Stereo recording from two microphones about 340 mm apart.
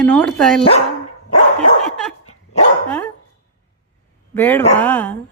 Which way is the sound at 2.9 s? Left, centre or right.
Centre.